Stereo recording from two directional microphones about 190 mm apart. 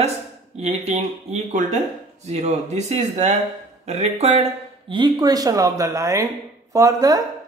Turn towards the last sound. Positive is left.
turn(degrees=-20)  # may be behind; listen again after turning